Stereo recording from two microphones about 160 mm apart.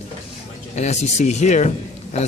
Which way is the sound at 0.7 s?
45° left (ahead or behind).